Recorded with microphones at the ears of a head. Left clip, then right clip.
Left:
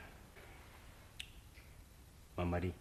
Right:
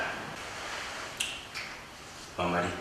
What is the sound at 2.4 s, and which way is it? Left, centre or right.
Speech, right.